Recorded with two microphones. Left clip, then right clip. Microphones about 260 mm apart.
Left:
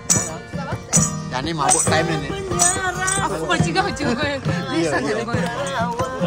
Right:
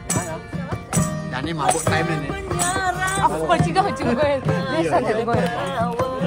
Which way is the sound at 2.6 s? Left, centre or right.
Centre.